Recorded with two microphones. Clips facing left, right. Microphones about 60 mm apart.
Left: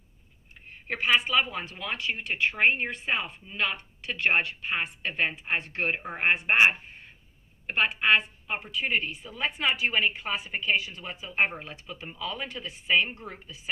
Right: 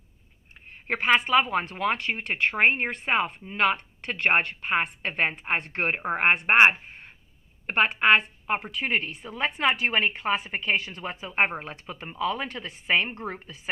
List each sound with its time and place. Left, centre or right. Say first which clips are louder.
0.9 s a woman's voice: right 3 dB; right
2.6 s a woman's voice: right 3 dB; right
4.1 s a woman's voice: right 2 dB; right